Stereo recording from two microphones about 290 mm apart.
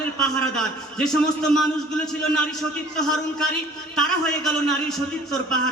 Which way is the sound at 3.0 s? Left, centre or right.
Centre.